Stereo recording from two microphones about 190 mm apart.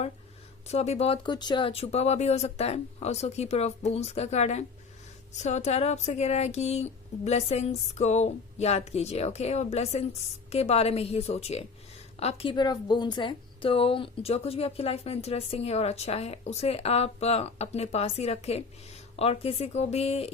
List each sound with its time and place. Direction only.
0.7 s a woman's voice: 35° left (ahead or behind)